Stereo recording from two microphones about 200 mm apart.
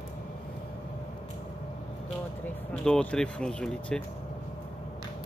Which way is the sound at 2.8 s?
5° left (ahead or behind).